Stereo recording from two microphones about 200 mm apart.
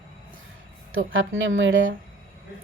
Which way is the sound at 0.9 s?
75° right (ahead or behind).